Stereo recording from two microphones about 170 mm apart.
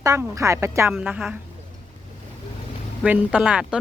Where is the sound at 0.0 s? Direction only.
20° right (ahead or behind).